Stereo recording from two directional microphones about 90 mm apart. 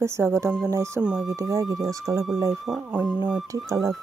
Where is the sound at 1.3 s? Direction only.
40° right (ahead or behind).